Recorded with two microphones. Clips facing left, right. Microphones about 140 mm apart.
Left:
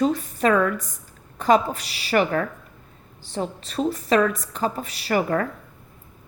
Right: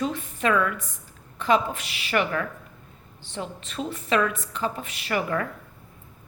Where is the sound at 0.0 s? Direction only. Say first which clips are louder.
Left 5 dB; 40° left (ahead or behind).